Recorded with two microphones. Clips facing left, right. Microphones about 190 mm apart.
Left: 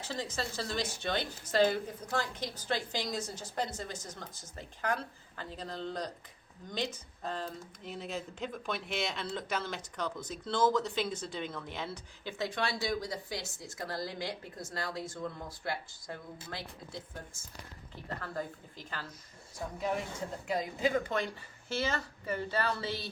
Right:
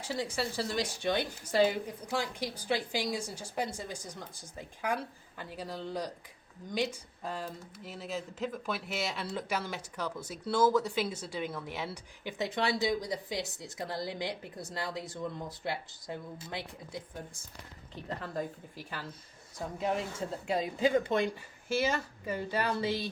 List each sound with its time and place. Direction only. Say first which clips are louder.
0.0 s speech: right 3 dB; 10° right (ahead or behind)
18.2 s speech: right 2 dB; 15° right (ahead or behind)
19.8 s speech: right 2 dB; 25° right (ahead or behind)
21.7 s speech: right 4 dB; 10° right (ahead or behind)